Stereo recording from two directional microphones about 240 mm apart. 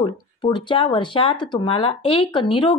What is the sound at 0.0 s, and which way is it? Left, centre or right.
Speech, centre.